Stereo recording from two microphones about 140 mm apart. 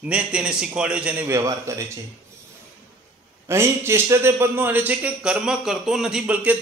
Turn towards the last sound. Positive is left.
turn(degrees=-5)  # may be behind; listen again after turning